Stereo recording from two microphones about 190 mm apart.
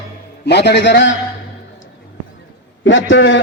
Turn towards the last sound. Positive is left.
turn(degrees=80)